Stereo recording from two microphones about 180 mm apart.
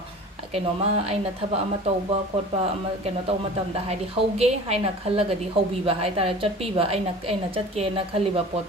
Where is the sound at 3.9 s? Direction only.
35° right (ahead or behind).